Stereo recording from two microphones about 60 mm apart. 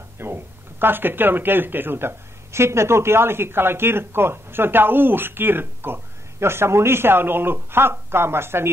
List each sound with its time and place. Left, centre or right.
0.2 s speech: right